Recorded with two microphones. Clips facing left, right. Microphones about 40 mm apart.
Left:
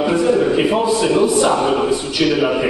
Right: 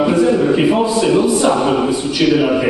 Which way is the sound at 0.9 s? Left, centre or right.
Centre.